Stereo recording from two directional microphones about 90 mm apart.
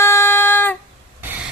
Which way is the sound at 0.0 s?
30° left (ahead or behind).